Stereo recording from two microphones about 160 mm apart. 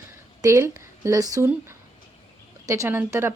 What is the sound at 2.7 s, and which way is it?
Speech, 15° right (ahead or behind).